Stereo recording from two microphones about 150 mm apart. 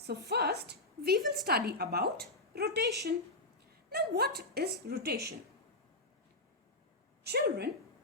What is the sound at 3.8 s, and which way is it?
A woman's voice, 90° right.